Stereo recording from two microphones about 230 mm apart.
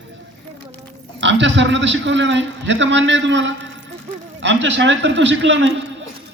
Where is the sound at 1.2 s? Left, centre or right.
Right.